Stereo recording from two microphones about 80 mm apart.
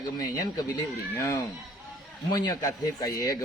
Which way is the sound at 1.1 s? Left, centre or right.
Left.